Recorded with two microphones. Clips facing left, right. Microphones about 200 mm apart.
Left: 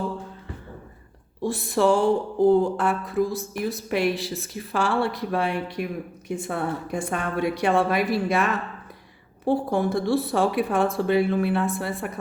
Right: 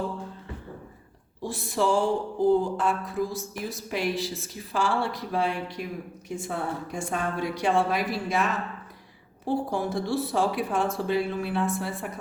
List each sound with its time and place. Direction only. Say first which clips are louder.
1.4 s a woman's voice: left 5 dB; 60° left (ahead or behind)
9.5 s a woman's voice: left 5 dB; 60° left (ahead or behind)